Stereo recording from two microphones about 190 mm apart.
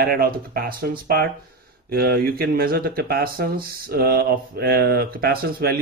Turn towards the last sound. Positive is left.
turn(degrees=-55)  # may be behind; listen again after turning